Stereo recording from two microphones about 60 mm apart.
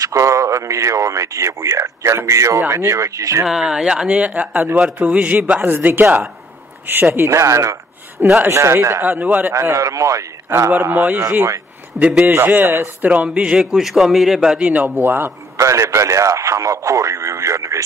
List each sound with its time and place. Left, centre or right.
0.0 s a man's voice: right
3.4 s a man's voice: centre
5.6 s a man's voice: right
7.2 s a man's voice: right
9.2 s a man's voice: right
9.5 s a man's voice: right
10.8 s a man's voice: right
11.9 s a man's voice: right
12.3 s a man's voice: right
13.0 s a man's voice: right
13.7 s a man's voice: centre
14.6 s a man's voice: right
15.5 s a man's voice: right